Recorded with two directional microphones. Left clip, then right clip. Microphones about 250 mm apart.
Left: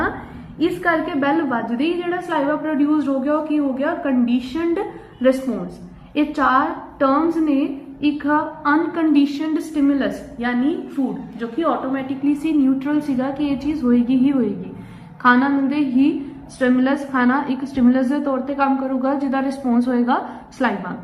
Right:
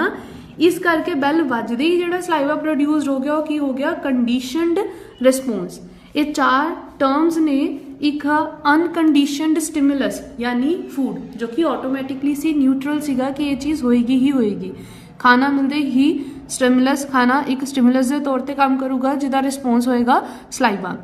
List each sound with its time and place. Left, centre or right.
0.8 s a woman's voice: right